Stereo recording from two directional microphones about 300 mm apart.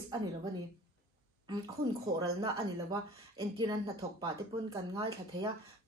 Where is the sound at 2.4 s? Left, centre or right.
Centre.